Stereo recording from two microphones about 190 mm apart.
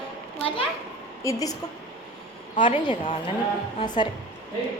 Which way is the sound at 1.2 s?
15° left (ahead or behind).